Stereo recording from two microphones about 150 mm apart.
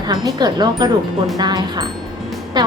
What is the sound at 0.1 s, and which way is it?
A woman's voice, 30° right (ahead or behind).